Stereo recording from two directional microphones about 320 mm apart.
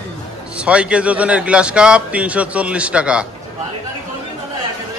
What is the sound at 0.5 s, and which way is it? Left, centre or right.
A man's voice, centre.